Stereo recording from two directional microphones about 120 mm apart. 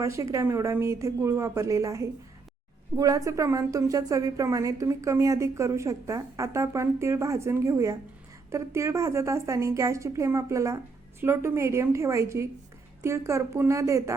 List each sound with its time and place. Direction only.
0.0 s a woman's voice: 25° right (ahead or behind)